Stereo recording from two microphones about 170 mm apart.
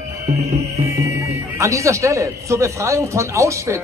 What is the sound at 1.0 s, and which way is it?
A man's voice, 15° right (ahead or behind).